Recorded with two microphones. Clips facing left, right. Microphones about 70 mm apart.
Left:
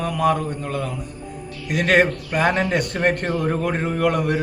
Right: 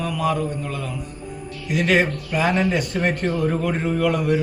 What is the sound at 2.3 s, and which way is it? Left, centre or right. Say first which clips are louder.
A man's voice: right 1 dB; left.